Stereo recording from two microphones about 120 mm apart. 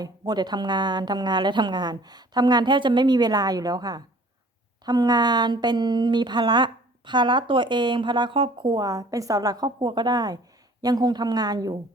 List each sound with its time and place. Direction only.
0.0 s speech: 35° right (ahead or behind)